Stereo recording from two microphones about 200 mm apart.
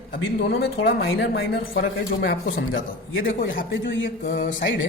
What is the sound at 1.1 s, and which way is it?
Speech, 65° left (ahead or behind).